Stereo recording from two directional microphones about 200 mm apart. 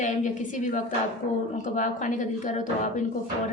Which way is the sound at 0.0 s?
40° left (ahead or behind).